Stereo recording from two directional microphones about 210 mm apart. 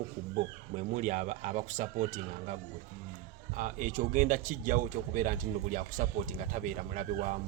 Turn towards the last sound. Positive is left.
turn(degrees=-40)  # may be behind; listen again after turning